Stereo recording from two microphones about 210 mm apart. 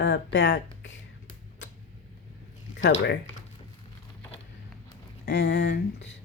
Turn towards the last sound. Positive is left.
turn(degrees=55)  # may be behind; listen again after turning